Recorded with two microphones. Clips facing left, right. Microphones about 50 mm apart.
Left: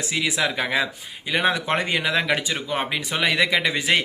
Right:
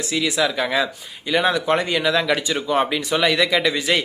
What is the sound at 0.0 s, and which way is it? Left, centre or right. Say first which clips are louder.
Speech: right 3 dB; left.